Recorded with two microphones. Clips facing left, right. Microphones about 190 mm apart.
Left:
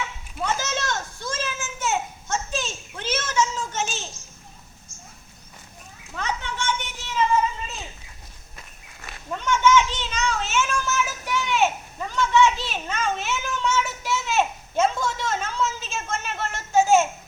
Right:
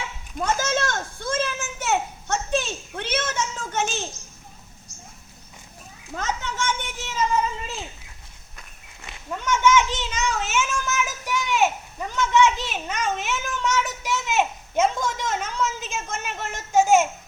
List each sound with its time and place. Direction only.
0.3 s children playing: 50° right (ahead or behind)
6.1 s children playing: 45° right (ahead or behind)
9.0 s children playing: 15° right (ahead or behind)